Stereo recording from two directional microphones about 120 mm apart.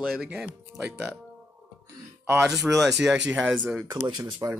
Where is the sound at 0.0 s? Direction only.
5° right (ahead or behind).